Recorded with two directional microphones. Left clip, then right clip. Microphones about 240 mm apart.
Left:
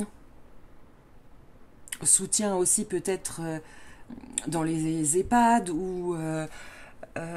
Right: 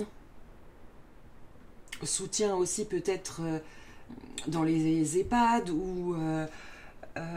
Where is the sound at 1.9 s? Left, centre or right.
Left.